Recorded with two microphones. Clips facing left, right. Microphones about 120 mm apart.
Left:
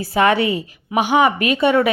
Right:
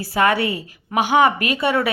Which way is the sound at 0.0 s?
20° left (ahead or behind).